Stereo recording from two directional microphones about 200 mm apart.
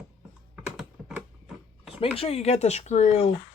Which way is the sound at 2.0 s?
30° left (ahead or behind).